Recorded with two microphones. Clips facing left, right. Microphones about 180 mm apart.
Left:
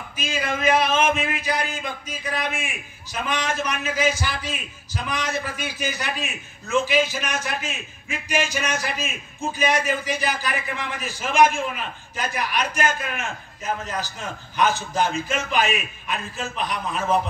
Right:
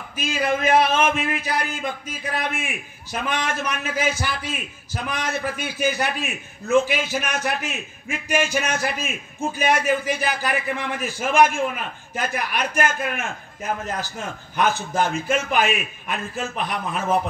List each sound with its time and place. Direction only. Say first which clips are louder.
0.2 s a man's voice: right 2 dB; 55° right (ahead or behind)